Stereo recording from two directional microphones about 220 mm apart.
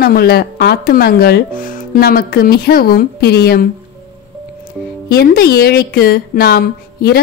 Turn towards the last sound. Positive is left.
turn(degrees=45)  # may be behind; listen again after turning